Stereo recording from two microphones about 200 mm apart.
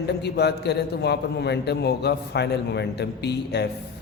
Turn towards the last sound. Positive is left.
turn(degrees=55)  # may be behind; listen again after turning